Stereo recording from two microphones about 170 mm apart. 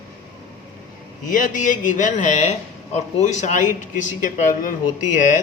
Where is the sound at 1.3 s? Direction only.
55° left (ahead or behind).